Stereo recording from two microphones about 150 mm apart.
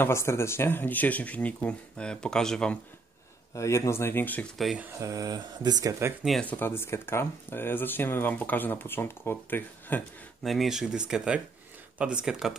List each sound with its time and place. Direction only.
0.0 s speech: 20° left (ahead or behind)
3.5 s speech: 20° left (ahead or behind)
4.6 s speech: centre (ahead or behind)
5.0 s speech: 25° right (ahead or behind)
6.2 s speech: centre (ahead or behind)
6.5 s speech: 15° left (ahead or behind)
10.4 s speech: centre (ahead or behind)